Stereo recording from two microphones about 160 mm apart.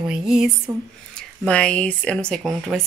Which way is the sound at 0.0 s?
5° right (ahead or behind).